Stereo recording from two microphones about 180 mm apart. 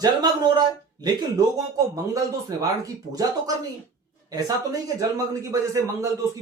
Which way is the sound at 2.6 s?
20° right (ahead or behind).